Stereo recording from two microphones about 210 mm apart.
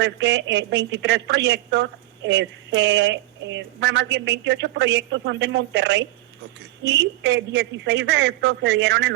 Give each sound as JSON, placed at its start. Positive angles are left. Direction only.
{"t": 0.0, "sound": "a woman's voice", "side_deg": -55}